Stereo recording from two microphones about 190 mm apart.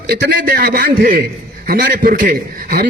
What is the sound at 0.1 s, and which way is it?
A man's voice, 50° right (ahead or behind).